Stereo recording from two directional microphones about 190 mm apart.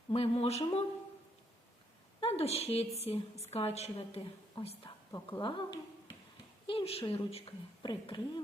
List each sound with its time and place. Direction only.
0.1 s a woman's voice: 30° left (ahead or behind)
2.2 s a woman's voice: 30° left (ahead or behind)